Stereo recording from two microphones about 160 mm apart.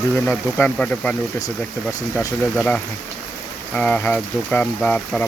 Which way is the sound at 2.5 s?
5° left (ahead or behind).